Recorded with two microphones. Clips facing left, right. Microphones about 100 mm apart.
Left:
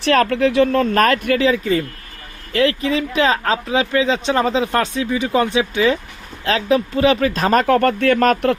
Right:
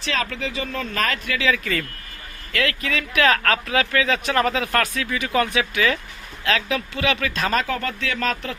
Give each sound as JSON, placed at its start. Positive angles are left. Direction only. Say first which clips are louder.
{"t": 0.0, "sound": "speech", "louder": "left 11 dB", "side_deg": 60}
{"t": 1.5, "sound": "speech", "louder": "left 6 dB", "side_deg": 30}